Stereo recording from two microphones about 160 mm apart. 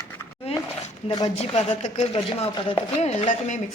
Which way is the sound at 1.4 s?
40° left (ahead or behind).